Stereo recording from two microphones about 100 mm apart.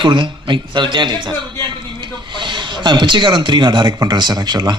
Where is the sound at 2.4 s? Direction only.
50° right (ahead or behind).